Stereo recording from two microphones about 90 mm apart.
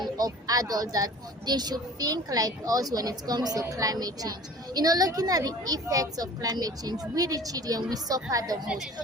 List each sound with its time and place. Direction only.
0.0 s a woman's voice: 45° right (ahead or behind)
8.6 s a woman's voice: 10° right (ahead or behind)